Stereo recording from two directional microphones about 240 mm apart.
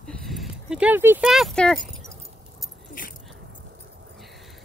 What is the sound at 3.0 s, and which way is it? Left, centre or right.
Dog, left.